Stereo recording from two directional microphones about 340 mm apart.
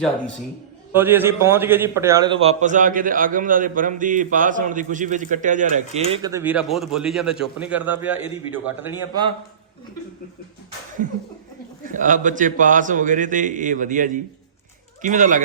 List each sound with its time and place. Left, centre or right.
0.9 s a man's voice: centre
11.9 s a man's voice: right